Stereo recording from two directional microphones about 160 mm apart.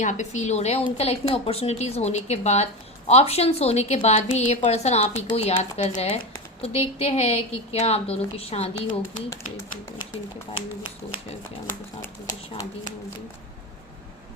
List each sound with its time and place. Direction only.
0.0 s a woman's voice: 50° left (ahead or behind)
12.0 s speech: 20° left (ahead or behind)